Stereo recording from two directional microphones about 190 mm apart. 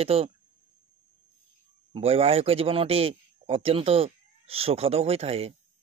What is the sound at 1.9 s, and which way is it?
A man's voice, 30° right (ahead or behind).